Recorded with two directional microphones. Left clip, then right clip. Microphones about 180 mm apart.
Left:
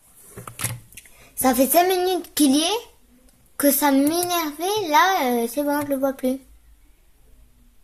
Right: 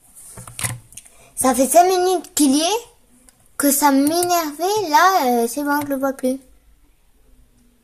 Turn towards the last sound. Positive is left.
turn(degrees=-25)  # may be behind; listen again after turning